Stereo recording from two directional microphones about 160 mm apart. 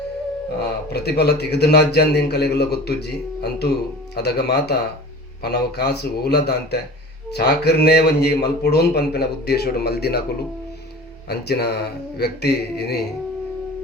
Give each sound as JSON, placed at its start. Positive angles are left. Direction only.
{"t": 0.6, "sound": "a man's voice", "side_deg": 90}
{"t": 11.3, "sound": "a man's voice", "side_deg": 90}